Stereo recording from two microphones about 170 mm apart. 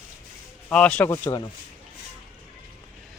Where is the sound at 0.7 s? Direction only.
5° left (ahead or behind).